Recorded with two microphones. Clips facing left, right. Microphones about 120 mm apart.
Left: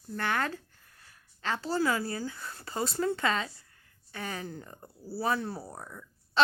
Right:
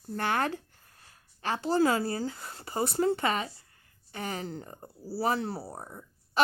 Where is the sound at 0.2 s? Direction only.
20° right (ahead or behind).